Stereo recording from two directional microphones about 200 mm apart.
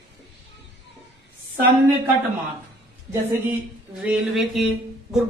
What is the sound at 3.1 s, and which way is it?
Speech, 10° right (ahead or behind).